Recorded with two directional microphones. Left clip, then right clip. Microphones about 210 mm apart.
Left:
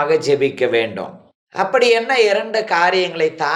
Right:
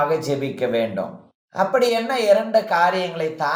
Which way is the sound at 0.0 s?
30° left (ahead or behind).